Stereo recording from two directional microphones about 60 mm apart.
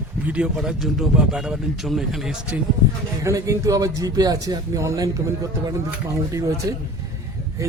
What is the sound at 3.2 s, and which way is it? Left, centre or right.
A man's voice, right.